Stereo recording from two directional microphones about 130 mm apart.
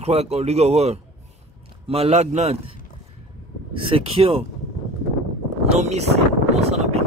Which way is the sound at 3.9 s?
45° right (ahead or behind).